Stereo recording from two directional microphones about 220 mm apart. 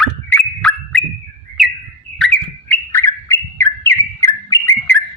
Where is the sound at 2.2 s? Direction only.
5° left (ahead or behind).